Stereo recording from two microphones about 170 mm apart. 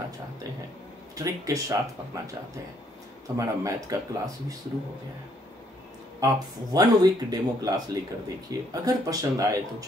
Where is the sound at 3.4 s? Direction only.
20° right (ahead or behind).